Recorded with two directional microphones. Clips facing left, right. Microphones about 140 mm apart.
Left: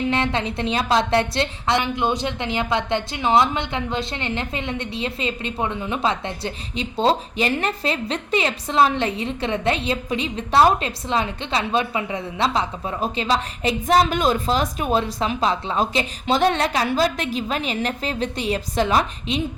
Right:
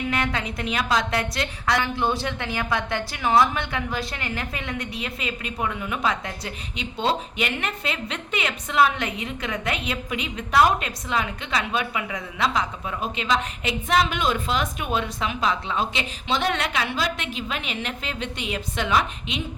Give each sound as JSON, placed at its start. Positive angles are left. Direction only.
{"t": 0.1, "sound": "a woman's voice", "side_deg": 25}